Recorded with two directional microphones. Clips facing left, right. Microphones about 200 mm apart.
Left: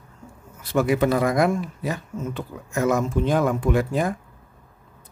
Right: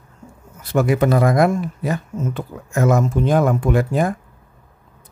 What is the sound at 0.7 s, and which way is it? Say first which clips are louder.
Speech: right 3 dB; 50° right (ahead or behind).